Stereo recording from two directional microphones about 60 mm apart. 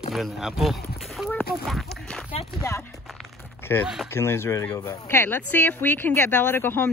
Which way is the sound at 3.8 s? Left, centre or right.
Centre.